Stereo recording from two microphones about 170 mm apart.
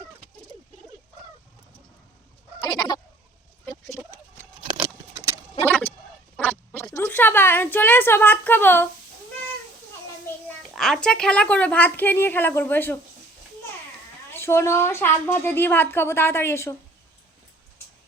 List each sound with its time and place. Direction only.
2.6 s goat: 25° left (ahead or behind)
3.7 s a sound: 20° left (ahead or behind)
5.6 s a sound: 10° left (ahead or behind)
6.9 s a woman's voice: 15° left (ahead or behind)
10.8 s a woman's voice: centre (ahead or behind)
14.3 s a woman's voice: 15° left (ahead or behind)